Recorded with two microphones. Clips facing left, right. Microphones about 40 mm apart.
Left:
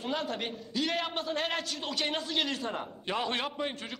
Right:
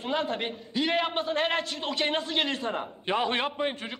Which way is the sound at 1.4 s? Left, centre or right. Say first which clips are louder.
Right 5 dB; centre.